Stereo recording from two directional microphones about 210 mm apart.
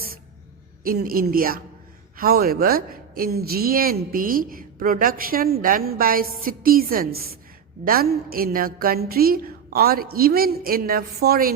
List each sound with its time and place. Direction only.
0.9 s a woman's voice: 45° right (ahead or behind)